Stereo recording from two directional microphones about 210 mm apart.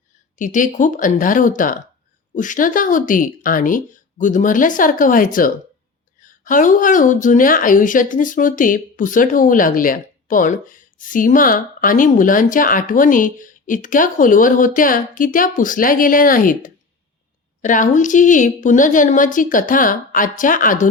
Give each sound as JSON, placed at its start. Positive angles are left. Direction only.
{"t": 0.3, "sound": "speech", "side_deg": 35}